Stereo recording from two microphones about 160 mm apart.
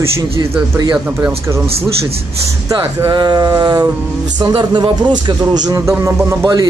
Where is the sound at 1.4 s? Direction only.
15° right (ahead or behind).